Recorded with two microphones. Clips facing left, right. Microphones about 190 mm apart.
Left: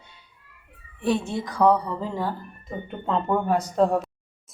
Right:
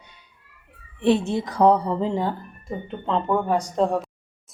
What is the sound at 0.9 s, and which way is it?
A woman's voice, 25° right (ahead or behind).